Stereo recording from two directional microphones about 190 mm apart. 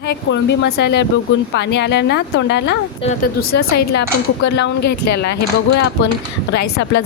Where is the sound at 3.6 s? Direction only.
65° left (ahead or behind).